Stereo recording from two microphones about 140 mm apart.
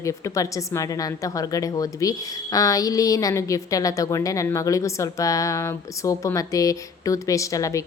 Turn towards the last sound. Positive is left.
turn(degrees=25)  # may be behind; listen again after turning